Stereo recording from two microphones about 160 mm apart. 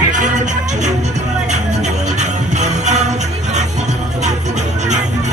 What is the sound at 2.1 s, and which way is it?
Music, 45° right (ahead or behind).